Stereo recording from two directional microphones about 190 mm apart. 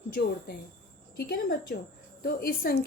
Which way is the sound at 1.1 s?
55° left (ahead or behind).